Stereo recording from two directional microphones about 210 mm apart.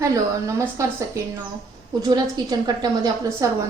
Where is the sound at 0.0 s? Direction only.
15° right (ahead or behind).